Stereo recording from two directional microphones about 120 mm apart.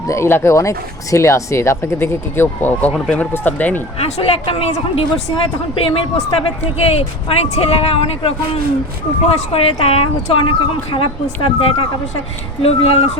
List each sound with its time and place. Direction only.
0.1 s speech: 20° left (ahead or behind)
4.0 s speech: 50° left (ahead or behind)
9.5 s a woman's voice: 55° left (ahead or behind)